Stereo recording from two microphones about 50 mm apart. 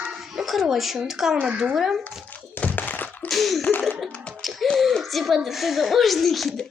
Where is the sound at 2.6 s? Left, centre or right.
Left.